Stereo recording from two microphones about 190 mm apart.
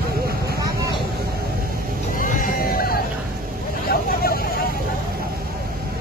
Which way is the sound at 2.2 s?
45° left (ahead or behind).